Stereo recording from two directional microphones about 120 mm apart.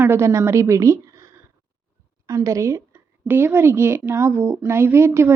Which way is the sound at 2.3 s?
25° right (ahead or behind).